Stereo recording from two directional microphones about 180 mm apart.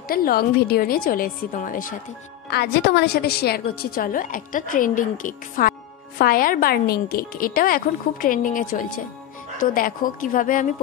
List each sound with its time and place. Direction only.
0.1 s a woman's voice: 55° left (ahead or behind)
2.5 s a woman's voice: 65° left (ahead or behind); by 10.7 s 45° left (ahead or behind)